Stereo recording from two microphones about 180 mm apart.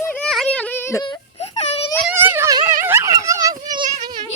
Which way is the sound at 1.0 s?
30° left (ahead or behind).